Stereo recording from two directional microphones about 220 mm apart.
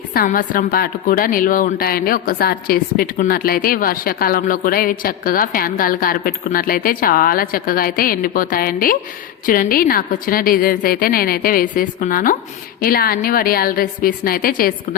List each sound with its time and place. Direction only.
0.1 s a woman's voice: 40° left (ahead or behind)